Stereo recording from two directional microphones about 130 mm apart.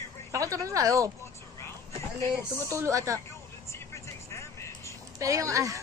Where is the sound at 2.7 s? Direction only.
20° right (ahead or behind).